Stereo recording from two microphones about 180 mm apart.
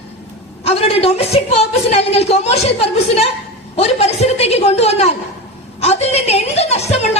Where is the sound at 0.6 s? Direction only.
35° left (ahead or behind).